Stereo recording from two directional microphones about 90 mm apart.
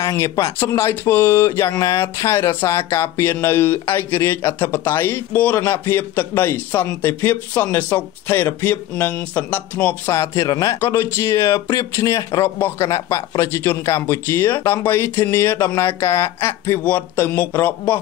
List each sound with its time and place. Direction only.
0.0 s speech: 35° left (ahead or behind)
10.1 s speech: 35° left (ahead or behind)
12.4 s speech: 25° left (ahead or behind)
16.8 s speech: 20° left (ahead or behind)